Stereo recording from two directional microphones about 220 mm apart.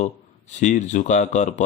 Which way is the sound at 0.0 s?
30° left (ahead or behind).